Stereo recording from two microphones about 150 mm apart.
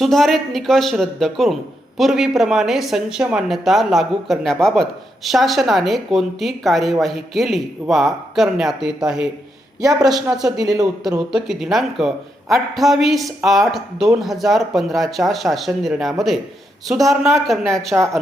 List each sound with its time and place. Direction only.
0.0 s a man's voice: centre (ahead or behind)
9.8 s a woman's voice: 25° right (ahead or behind)
10.3 s a man's voice: 5° right (ahead or behind)